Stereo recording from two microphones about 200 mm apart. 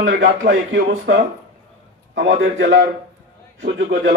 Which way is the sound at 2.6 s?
60° right (ahead or behind).